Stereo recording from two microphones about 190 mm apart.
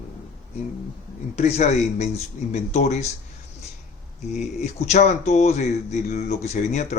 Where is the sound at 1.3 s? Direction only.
35° left (ahead or behind).